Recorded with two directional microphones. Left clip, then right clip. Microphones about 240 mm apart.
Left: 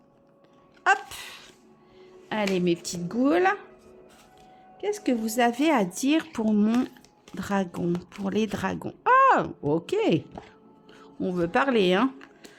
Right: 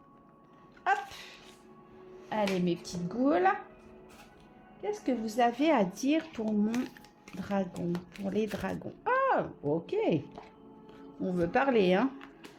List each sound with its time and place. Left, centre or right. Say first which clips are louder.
0.9 s a sound: left 7 dB; left
2.3 s speech: left 5 dB; left
4.8 s speech: left 6 dB; left
11.2 s speech: left 4 dB; left